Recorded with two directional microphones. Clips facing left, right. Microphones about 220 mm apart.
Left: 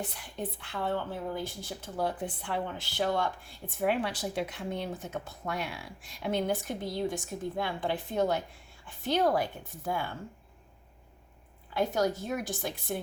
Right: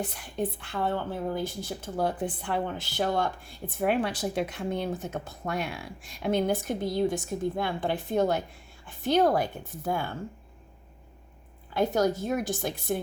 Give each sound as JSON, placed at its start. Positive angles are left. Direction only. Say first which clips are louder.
{"t": 0.6, "sound": "speech", "louder": "right 3 dB", "side_deg": -45}
{"t": 11.7, "sound": "speech", "louder": "right 4 dB", "side_deg": -45}